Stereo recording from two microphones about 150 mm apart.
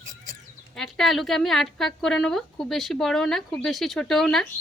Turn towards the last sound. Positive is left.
turn(degrees=0)  # may be behind; listen again after turning